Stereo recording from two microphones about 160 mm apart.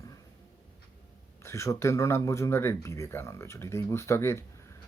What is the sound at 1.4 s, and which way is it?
Speech, 15° left (ahead or behind).